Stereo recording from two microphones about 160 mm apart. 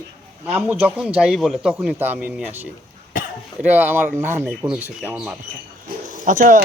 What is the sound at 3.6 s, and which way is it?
A man's voice, 10° right (ahead or behind).